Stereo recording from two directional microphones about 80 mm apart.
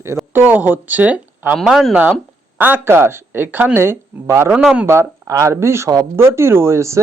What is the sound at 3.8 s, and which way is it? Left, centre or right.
Speech, right.